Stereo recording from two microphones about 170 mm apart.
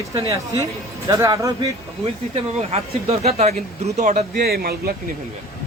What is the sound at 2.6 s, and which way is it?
Speech, 35° right (ahead or behind).